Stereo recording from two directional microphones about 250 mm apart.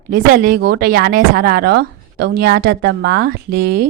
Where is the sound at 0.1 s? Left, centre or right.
Right.